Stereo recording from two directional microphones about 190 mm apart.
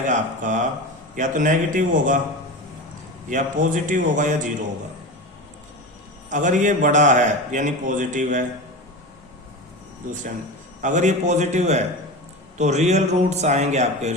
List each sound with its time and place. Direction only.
0.1 s a man's voice: 40° right (ahead or behind)
3.2 s a man's voice: 40° right (ahead or behind)
6.3 s a man's voice: 40° right (ahead or behind)
10.8 s a man's voice: 40° right (ahead or behind)